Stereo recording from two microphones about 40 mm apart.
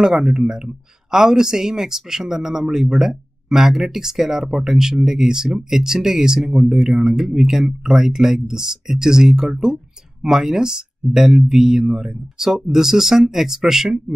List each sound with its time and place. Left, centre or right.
0.0 s speech: centre